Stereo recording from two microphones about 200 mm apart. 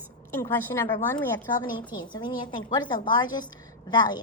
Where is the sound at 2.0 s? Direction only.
20° left (ahead or behind).